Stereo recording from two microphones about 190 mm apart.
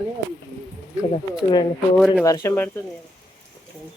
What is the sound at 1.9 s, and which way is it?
Speech, centre (ahead or behind).